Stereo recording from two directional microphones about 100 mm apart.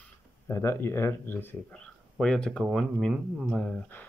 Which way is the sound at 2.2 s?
5° left (ahead or behind).